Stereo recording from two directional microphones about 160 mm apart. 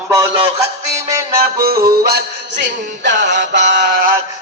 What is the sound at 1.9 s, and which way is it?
Music, 75° right (ahead or behind).